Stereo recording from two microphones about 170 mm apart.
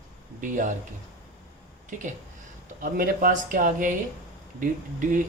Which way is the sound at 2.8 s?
55° right (ahead or behind).